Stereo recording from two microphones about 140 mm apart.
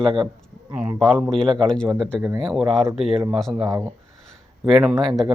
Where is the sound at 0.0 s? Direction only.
35° right (ahead or behind).